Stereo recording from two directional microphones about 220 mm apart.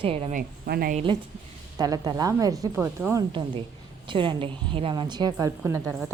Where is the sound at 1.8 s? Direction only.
15° right (ahead or behind).